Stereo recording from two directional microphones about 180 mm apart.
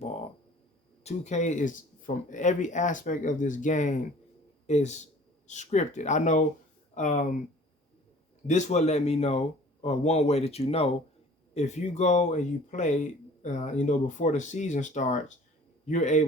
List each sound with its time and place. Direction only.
1.0 s speech: 40° left (ahead or behind)
8.4 s speech: 40° left (ahead or behind)